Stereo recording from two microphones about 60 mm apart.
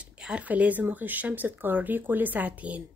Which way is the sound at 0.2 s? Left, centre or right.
Right.